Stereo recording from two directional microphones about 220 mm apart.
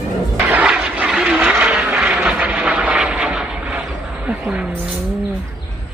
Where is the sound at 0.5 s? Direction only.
5° right (ahead or behind).